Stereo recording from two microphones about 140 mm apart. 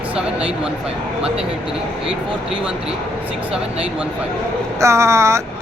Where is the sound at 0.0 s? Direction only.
10° right (ahead or behind).